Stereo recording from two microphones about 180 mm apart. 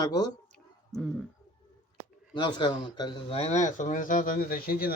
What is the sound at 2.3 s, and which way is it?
Speech, 25° left (ahead or behind).